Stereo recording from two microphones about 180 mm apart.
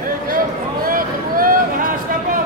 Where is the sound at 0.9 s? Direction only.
50° right (ahead or behind).